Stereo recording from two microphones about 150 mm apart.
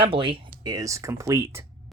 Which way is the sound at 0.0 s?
35° right (ahead or behind).